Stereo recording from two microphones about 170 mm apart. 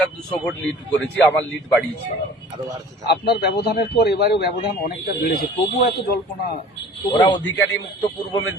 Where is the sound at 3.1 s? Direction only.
75° left (ahead or behind).